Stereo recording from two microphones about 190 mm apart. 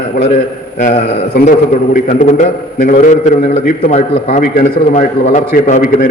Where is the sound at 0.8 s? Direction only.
45° left (ahead or behind).